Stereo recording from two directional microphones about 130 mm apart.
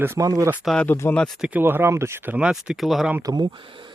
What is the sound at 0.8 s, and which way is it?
Speech, 20° left (ahead or behind).